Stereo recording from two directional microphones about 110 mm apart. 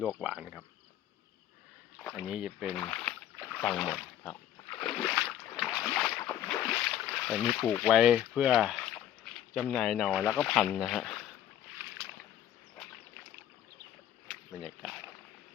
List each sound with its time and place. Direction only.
0.0 s insect: 5° right (ahead or behind)
2.1 s insect: 5° right (ahead or behind)
2.9 s speech: 10° left (ahead or behind)
4.2 s boat: 15° left (ahead or behind)
4.8 s splash: 5° left (ahead or behind)
5.1 s boat: 5° right (ahead or behind)
6.1 s boat: 25° left (ahead or behind)
6.9 s boat: centre (ahead or behind)
7.8 s speech: 5° right (ahead or behind)
8.8 s boat: 5° left (ahead or behind)
9.6 s speech: 5° left (ahead or behind)
14.6 s speech: 5° right (ahead or behind)